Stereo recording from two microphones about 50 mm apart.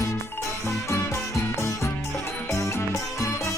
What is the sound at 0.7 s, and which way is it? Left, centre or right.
Music, left.